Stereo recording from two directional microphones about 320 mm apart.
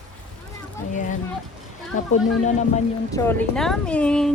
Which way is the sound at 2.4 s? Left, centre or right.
Left.